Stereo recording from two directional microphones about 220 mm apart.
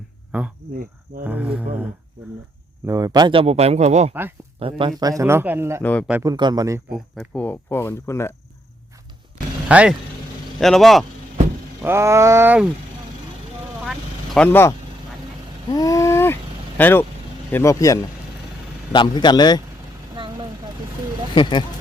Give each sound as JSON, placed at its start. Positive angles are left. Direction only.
{"t": 0.3, "sound": "speech", "side_deg": -5}
{"t": 2.8, "sound": "speech", "side_deg": -15}
{"t": 4.1, "sound": "speech", "side_deg": -10}
{"t": 4.6, "sound": "speech", "side_deg": -20}
{"t": 5.8, "sound": "speech", "side_deg": 5}
{"t": 6.1, "sound": "speech", "side_deg": -10}
{"t": 6.3, "sound": "speech", "side_deg": -20}
{"t": 6.9, "sound": "speech", "side_deg": 5}
{"t": 9.6, "sound": "speech", "side_deg": -5}
{"t": 11.8, "sound": "speech", "side_deg": -10}
{"t": 14.3, "sound": "a man's voice", "side_deg": 10}